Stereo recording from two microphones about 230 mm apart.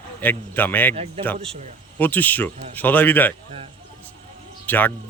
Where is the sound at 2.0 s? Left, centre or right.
Centre.